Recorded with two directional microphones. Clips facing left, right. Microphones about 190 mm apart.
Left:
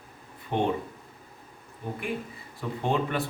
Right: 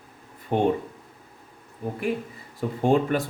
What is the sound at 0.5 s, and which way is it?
Speech, 10° right (ahead or behind).